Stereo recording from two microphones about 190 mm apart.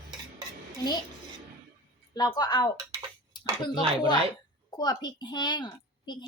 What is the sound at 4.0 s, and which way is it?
A woman's voice, 25° left (ahead or behind).